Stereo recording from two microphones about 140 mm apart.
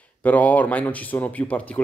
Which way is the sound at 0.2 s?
10° left (ahead or behind).